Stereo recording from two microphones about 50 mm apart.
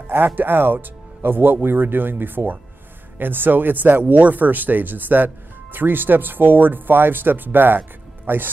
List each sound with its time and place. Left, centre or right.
0.0 s music: right
0.4 s speech: right